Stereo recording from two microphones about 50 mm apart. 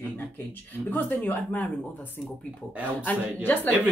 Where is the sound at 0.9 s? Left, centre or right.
Left.